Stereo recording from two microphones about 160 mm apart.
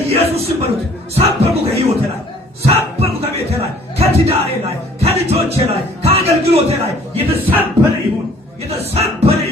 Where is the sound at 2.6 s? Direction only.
40° right (ahead or behind).